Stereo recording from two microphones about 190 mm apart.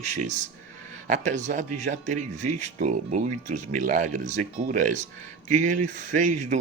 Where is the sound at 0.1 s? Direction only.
40° right (ahead or behind).